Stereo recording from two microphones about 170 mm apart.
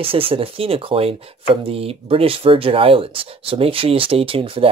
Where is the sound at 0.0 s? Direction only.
30° right (ahead or behind).